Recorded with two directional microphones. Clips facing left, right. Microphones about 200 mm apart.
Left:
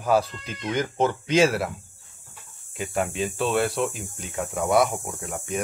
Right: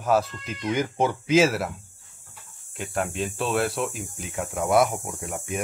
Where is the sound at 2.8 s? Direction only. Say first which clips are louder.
Left 2 dB; centre (ahead or behind).